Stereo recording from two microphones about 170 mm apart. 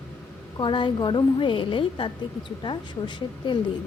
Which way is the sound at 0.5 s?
30° left (ahead or behind).